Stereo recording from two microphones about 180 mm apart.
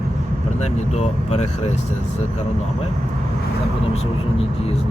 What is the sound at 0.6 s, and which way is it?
Speech, 40° left (ahead or behind).